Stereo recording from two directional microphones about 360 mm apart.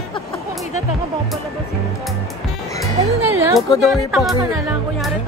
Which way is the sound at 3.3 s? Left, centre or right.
Centre.